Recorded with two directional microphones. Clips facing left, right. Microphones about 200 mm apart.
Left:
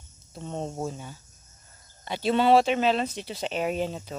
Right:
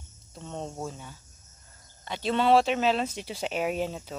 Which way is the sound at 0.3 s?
10° left (ahead or behind).